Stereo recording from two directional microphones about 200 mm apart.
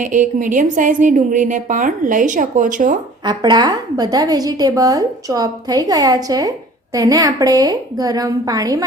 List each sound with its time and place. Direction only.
0.0 s a woman's voice: 40° right (ahead or behind)
3.2 s a woman's voice: 20° right (ahead or behind)